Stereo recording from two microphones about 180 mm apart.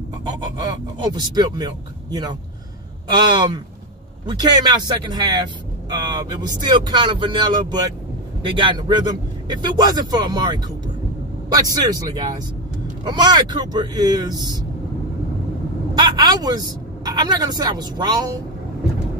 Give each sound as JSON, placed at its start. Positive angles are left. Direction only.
{"t": 0.7, "sound": "speech", "side_deg": -25}
{"t": 16.0, "sound": "speech", "side_deg": -20}